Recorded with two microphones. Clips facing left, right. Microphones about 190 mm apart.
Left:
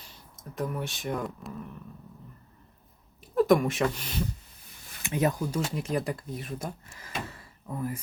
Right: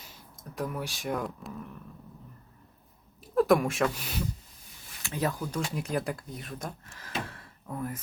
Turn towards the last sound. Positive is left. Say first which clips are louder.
# left 2 dB
turn(degrees=5)  # may be behind; listen again after turning